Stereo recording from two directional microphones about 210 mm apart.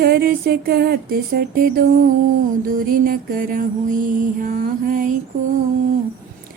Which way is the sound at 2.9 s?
40° right (ahead or behind).